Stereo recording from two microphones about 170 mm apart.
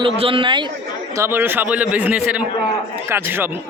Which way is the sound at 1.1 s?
15° right (ahead or behind).